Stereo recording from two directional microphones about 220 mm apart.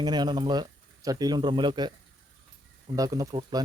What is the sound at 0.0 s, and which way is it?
Speech, 20° right (ahead or behind).